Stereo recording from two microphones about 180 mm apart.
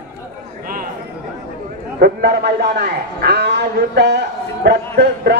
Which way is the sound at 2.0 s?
60° right (ahead or behind).